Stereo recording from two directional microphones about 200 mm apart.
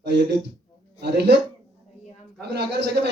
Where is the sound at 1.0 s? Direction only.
55° right (ahead or behind).